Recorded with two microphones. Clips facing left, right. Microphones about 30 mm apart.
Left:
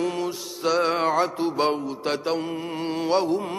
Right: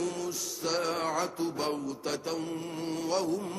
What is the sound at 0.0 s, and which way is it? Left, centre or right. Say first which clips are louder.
Mantra: left 7 dB; left.